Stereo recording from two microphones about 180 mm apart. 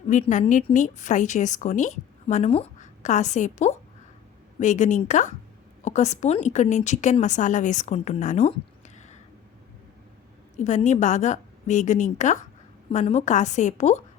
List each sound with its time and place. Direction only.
0.1 s a woman's voice: 45° left (ahead or behind)
10.6 s a woman's voice: 40° left (ahead or behind)